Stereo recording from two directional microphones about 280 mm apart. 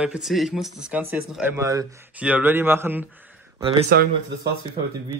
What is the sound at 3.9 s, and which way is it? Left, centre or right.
Speech, right.